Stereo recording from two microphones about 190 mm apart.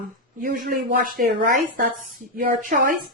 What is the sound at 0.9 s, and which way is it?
Speech, 50° right (ahead or behind).